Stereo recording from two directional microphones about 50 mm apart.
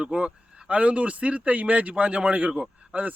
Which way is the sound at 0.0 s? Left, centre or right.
Centre.